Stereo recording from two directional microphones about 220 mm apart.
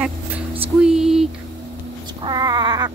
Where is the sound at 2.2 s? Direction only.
20° right (ahead or behind).